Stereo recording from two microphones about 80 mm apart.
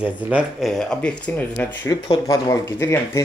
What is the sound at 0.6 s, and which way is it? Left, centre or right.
Speech, centre.